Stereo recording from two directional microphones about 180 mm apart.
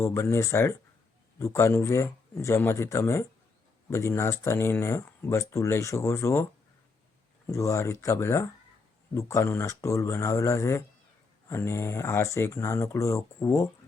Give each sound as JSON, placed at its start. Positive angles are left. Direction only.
{"t": 0.0, "sound": "speech", "side_deg": 15}